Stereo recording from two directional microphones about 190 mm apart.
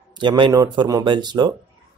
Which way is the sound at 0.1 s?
25° right (ahead or behind).